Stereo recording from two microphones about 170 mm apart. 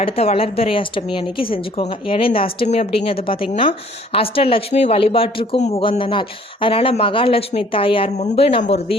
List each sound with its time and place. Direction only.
0.0 s a woman's voice: 35° left (ahead or behind)